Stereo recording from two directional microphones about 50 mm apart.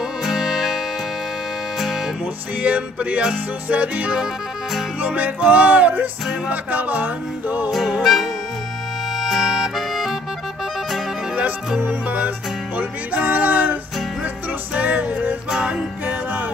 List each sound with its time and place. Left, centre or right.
0.2 s music: centre
2.6 s music: right
7.7 s music: centre
11.8 s music: right
15.5 s music: centre